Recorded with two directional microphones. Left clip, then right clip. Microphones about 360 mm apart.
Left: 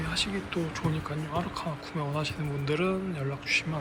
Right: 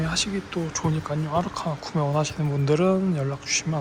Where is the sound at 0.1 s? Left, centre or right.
Centre.